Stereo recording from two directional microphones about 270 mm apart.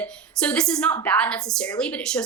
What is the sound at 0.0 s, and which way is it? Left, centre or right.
A woman's voice, centre.